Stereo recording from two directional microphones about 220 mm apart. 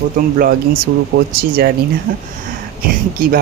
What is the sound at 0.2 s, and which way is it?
Speech, 40° right (ahead or behind).